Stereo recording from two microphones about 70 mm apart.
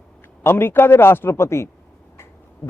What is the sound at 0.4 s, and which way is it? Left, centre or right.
A man's voice, left.